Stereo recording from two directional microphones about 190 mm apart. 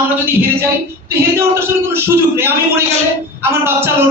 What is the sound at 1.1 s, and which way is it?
A man's voice, 15° right (ahead or behind).